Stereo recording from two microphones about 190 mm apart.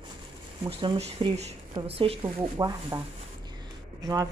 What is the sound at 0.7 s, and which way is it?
A woman's voice, 30° right (ahead or behind).